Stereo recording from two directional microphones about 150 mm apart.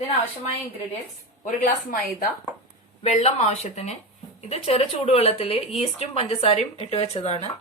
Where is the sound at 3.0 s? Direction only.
45° left (ahead or behind).